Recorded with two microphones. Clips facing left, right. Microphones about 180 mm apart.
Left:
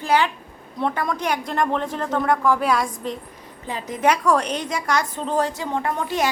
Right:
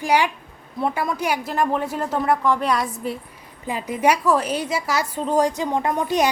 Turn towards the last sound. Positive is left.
turn(degrees=-15)  # may be behind; listen again after turning